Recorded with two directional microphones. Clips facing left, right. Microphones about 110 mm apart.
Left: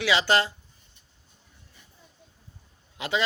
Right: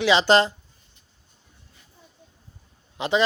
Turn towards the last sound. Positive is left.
turn(degrees=-20)  # may be behind; listen again after turning